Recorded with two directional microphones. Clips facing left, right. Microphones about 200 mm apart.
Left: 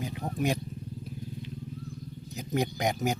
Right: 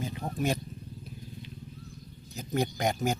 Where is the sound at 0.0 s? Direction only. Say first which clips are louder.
Even; 15° left (ahead or behind).